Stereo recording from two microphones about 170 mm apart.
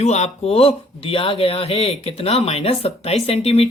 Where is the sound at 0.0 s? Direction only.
40° left (ahead or behind).